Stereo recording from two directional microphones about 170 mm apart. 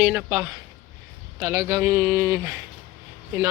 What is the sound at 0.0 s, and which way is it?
A man's voice, 10° right (ahead or behind).